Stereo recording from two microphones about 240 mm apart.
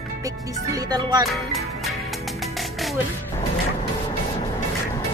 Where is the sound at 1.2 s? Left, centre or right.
Centre.